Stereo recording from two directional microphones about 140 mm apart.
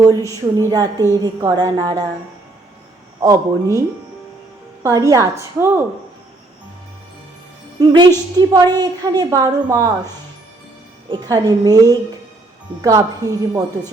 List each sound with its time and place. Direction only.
0.0 s speech: 20° right (ahead or behind)
3.2 s speech: 25° right (ahead or behind)
4.8 s speech: 25° right (ahead or behind)
7.8 s speech: 30° right (ahead or behind)
11.1 s speech: 25° right (ahead or behind)